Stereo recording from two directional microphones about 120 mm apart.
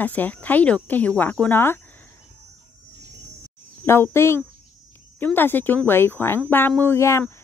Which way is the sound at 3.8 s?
20° left (ahead or behind).